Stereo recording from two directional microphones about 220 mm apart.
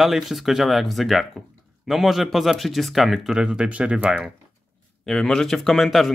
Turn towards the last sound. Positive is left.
turn(degrees=0)  # may be behind; listen again after turning